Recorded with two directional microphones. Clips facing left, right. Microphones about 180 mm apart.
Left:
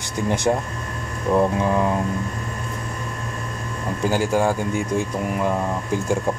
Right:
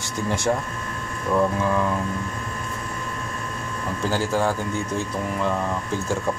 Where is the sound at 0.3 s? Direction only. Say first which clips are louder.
Left 3 dB; 20° left (ahead or behind).